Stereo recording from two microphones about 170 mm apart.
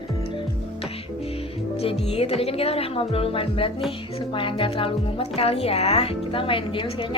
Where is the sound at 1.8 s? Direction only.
35° left (ahead or behind).